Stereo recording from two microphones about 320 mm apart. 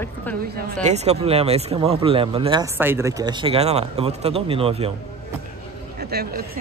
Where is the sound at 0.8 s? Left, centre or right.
Centre.